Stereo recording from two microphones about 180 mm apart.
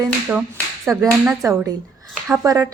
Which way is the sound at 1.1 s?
15° right (ahead or behind).